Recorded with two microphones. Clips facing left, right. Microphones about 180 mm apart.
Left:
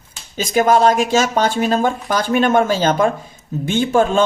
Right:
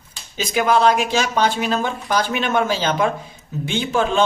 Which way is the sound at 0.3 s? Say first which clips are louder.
Left 4 dB; 45° left (ahead or behind).